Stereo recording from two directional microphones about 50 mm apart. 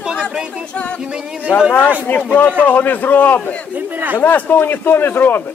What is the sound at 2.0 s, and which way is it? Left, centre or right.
A man's voice, left.